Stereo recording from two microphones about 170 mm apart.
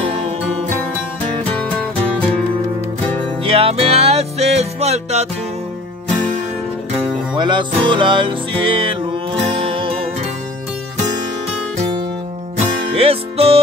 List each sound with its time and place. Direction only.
3.4 s music: 35° right (ahead or behind)
7.3 s music: 30° right (ahead or behind)
12.5 s music: 35° right (ahead or behind)